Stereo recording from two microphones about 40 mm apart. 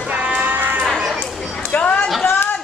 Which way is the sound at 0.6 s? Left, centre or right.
Right.